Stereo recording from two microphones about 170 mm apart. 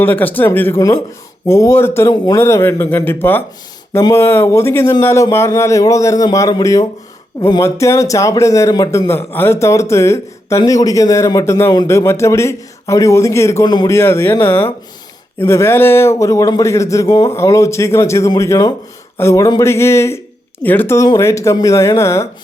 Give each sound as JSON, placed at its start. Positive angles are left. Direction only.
{"t": 0.0, "sound": "a man's voice", "side_deg": 10}